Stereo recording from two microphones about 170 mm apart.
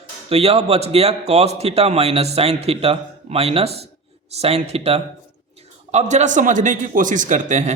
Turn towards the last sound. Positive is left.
turn(degrees=-45)  # may be behind; listen again after turning